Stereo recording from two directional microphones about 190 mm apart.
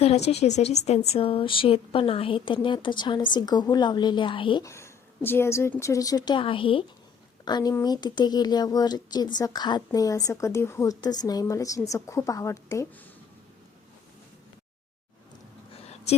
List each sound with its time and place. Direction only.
0.0 s speech: 35° left (ahead or behind); by 12.9 s 15° left (ahead or behind)